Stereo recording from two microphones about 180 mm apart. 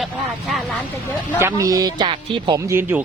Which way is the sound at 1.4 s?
15° right (ahead or behind).